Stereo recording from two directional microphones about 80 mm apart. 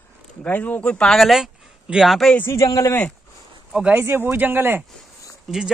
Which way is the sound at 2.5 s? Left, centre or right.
Left.